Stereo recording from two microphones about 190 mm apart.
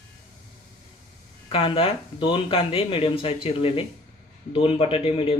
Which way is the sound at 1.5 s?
30° left (ahead or behind).